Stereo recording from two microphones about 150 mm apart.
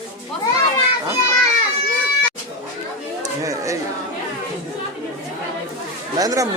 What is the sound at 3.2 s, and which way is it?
Chatter, 20° right (ahead or behind).